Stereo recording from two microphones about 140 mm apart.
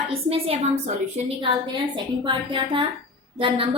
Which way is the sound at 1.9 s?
35° right (ahead or behind).